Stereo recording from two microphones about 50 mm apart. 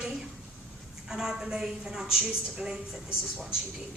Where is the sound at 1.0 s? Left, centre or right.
Centre.